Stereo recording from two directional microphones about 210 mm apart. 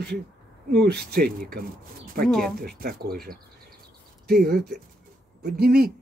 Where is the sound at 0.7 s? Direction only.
50° right (ahead or behind).